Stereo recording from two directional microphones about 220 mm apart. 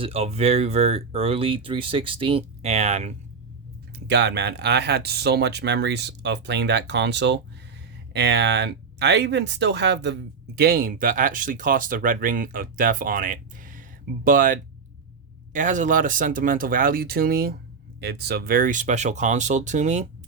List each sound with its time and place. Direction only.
0.0 s speech: 25° right (ahead or behind)
4.0 s speech: 50° right (ahead or behind); by 20.1 s 35° right (ahead or behind)